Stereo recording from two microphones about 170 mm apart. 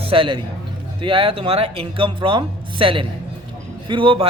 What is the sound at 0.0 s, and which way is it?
A man's voice, 30° right (ahead or behind).